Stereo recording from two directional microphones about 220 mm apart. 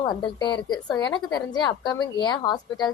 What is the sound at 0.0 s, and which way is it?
A woman's voice, 20° left (ahead or behind).